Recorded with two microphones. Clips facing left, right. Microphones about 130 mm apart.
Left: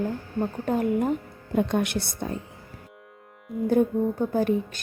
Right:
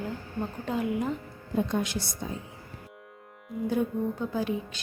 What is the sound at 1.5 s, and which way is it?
Speech, 65° left (ahead or behind).